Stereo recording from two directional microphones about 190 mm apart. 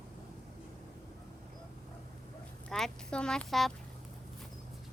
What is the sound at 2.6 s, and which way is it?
Speech, 5° left (ahead or behind).